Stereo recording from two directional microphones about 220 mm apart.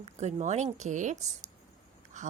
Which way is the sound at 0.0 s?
30° right (ahead or behind).